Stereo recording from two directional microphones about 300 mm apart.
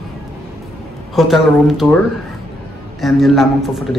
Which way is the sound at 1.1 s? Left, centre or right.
Centre.